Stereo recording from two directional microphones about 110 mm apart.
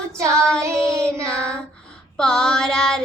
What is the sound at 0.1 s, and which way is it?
Child singing, 25° right (ahead or behind).